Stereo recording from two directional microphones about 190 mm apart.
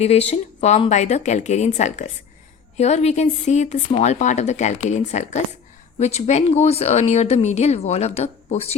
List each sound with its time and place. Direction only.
0.0 s speech: 35° left (ahead or behind)